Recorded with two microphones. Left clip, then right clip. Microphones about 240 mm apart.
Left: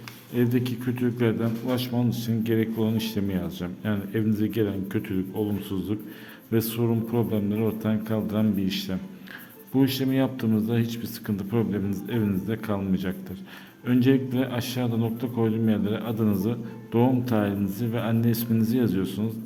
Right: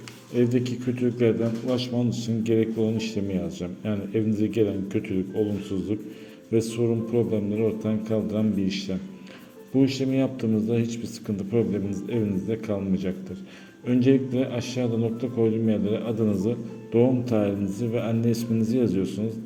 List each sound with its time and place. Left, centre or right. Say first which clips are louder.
0.3 s a man's voice: right 2 dB; centre